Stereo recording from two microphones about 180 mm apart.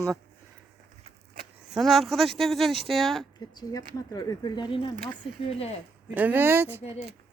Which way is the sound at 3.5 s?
20° left (ahead or behind).